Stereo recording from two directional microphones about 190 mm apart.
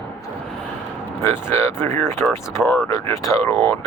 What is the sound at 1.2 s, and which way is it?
Speech, 10° left (ahead or behind).